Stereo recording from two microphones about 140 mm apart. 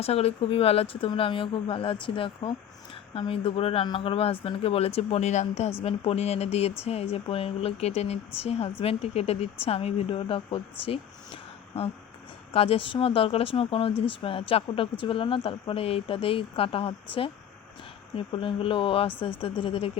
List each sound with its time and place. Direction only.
0.0 s speech: 45° left (ahead or behind)